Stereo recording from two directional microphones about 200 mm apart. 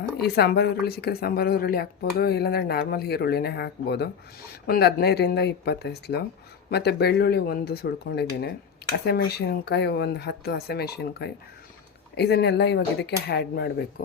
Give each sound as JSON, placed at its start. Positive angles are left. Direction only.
{"t": 0.3, "sound": "speech", "side_deg": 55}